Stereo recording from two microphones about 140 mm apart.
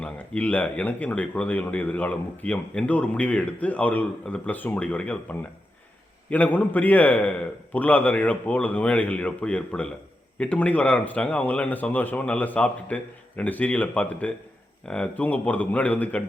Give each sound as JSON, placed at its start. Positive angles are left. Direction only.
{"t": 0.0, "sound": "speech", "side_deg": 10}